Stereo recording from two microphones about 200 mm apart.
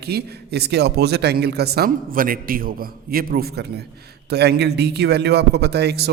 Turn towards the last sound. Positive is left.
turn(degrees=-55)  # may be behind; listen again after turning